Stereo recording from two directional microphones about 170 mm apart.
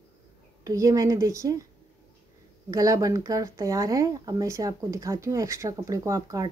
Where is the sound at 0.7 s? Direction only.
20° right (ahead or behind).